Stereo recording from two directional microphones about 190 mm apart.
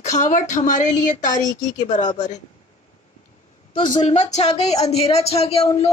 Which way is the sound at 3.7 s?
35° left (ahead or behind).